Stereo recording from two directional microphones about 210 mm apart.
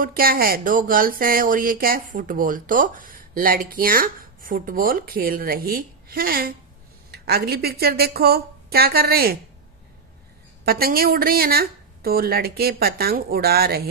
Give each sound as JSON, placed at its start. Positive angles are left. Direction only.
{"t": 0.0, "sound": "a woman's voice", "side_deg": -45}
{"t": 10.6, "sound": "speech", "side_deg": -45}